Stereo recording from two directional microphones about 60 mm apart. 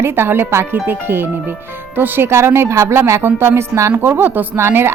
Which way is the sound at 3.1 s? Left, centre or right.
Right.